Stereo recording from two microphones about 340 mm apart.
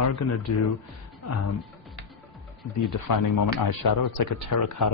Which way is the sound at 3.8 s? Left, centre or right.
Left.